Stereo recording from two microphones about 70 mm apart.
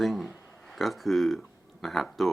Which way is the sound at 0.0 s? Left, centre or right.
Centre.